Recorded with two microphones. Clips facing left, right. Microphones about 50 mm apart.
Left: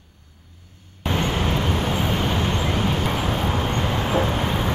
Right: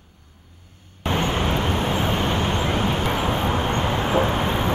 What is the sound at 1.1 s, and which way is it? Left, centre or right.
Vehicle, centre.